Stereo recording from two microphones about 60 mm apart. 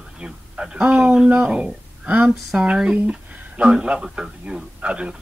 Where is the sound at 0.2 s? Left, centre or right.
Centre.